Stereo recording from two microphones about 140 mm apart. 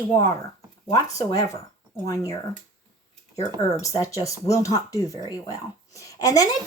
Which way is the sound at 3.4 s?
25° left (ahead or behind).